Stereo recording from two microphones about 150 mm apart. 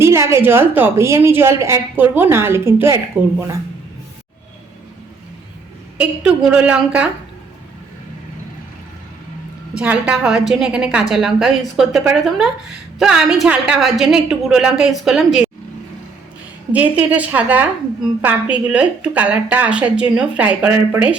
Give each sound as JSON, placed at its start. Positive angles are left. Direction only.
{"t": 0.0, "sound": "a woman's voice", "side_deg": -20}
{"t": 6.0, "sound": "a woman's voice", "side_deg": -10}
{"t": 9.7, "sound": "a woman's voice", "side_deg": -10}
{"t": 16.7, "sound": "a woman's voice", "side_deg": -10}